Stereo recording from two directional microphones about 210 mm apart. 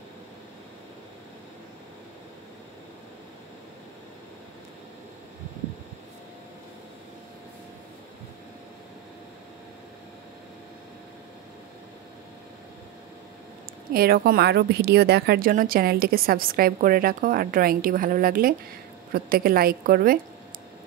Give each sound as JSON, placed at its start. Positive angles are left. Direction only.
{"t": 13.9, "sound": "speech", "side_deg": -45}